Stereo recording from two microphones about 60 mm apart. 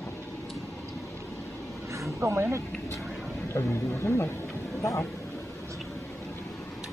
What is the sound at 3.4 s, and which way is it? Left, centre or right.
Speech, left.